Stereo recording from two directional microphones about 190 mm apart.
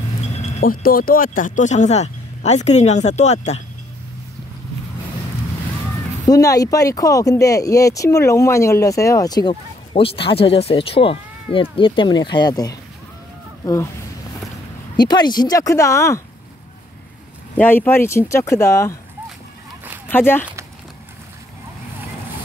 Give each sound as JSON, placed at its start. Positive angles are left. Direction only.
{"t": 0.4, "sound": "speech", "side_deg": 45}
{"t": 6.2, "sound": "speech", "side_deg": 20}
{"t": 15.0, "sound": "speech", "side_deg": 20}
{"t": 17.6, "sound": "speech", "side_deg": 10}
{"t": 20.1, "sound": "speech", "side_deg": 10}